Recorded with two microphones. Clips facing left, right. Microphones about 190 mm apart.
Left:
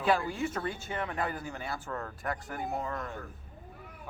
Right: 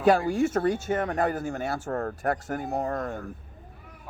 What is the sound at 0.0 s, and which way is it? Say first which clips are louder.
Speech: right 8 dB; 45° right (ahead or behind).